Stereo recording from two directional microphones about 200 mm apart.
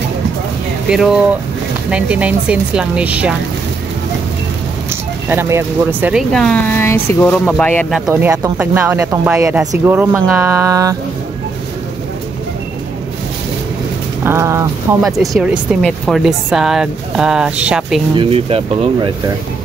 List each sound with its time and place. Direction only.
0.8 s speech: 5° right (ahead or behind)
5.3 s speech: 10° right (ahead or behind)
6.3 s speech: 5° left (ahead or behind)
8.1 s speech: 10° right (ahead or behind)
14.2 s a sound: 15° right (ahead or behind)
15.0 s speech: centre (ahead or behind)
18.1 s speech: 25° right (ahead or behind)